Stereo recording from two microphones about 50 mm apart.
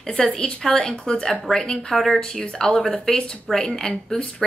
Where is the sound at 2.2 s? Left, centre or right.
Centre.